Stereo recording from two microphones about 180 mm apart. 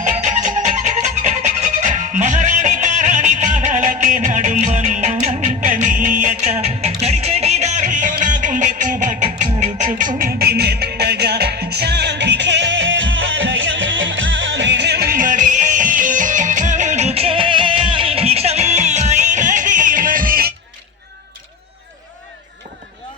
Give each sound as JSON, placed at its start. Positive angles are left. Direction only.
{"t": 0.0, "sound": "music", "side_deg": -40}